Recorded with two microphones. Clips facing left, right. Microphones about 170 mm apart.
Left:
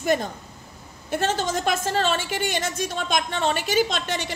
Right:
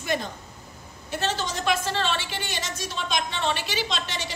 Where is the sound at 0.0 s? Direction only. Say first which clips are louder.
Left 5 dB; 45° left (ahead or behind).